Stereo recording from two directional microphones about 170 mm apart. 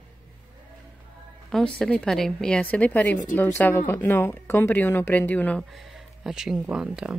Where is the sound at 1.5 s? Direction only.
5° left (ahead or behind).